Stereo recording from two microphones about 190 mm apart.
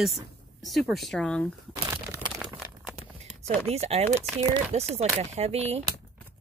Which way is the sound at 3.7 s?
35° right (ahead or behind).